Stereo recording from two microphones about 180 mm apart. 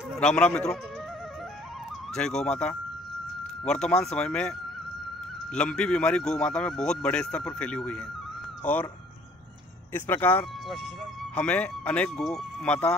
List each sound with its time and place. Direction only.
0.2 s speech: 5° left (ahead or behind)
2.1 s speech: 5° left (ahead or behind)
9.9 s speech: 10° left (ahead or behind)